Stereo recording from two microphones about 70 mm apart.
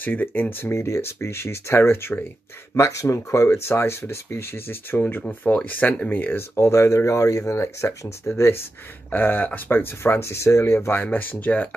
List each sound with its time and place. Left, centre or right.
0.0 s speech: left
5.2 s speech: centre
6.5 s speech: left
11.0 s speech: left